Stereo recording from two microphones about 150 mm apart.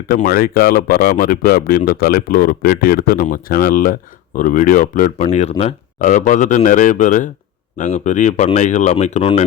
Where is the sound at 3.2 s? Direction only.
70° left (ahead or behind).